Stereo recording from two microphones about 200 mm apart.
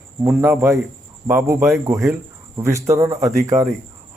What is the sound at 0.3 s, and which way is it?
Speech, 10° right (ahead or behind).